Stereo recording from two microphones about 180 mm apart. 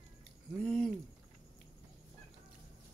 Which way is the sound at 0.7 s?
Centre (ahead or behind).